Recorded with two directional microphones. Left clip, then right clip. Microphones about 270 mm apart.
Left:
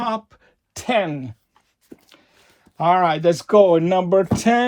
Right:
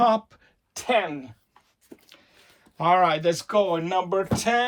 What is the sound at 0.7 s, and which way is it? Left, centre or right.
Speech, left.